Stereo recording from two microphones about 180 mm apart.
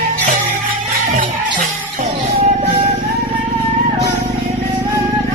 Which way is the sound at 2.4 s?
30° right (ahead or behind).